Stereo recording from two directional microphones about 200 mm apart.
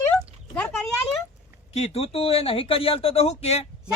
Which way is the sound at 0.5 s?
5° left (ahead or behind).